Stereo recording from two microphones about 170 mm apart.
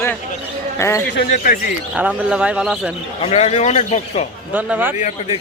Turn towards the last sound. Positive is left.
turn(degrees=45)  # may be behind; listen again after turning